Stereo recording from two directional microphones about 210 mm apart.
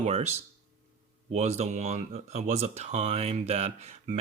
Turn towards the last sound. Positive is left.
turn(degrees=-30)  # may be behind; listen again after turning